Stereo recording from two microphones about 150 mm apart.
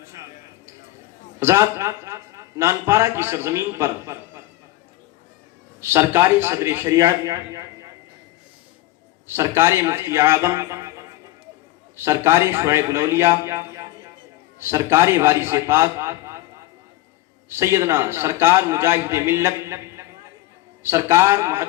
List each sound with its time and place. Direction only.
0.0 s a sound: 15° right (ahead or behind)
1.4 s a man's voice: 15° right (ahead or behind)
5.8 s a man's voice: 15° right (ahead or behind)
9.2 s a man's voice: 15° right (ahead or behind)
17.5 s a man's voice: 15° right (ahead or behind)